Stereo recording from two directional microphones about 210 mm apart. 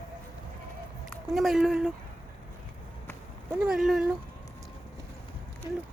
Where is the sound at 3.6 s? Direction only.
Centre (ahead or behind).